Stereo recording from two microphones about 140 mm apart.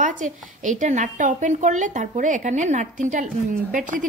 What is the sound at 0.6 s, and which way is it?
A woman's voice, 65° right (ahead or behind).